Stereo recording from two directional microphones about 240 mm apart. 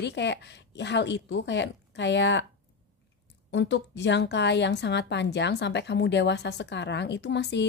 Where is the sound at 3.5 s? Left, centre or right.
Left.